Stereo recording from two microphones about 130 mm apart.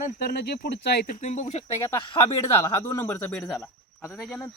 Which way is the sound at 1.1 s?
65° left (ahead or behind).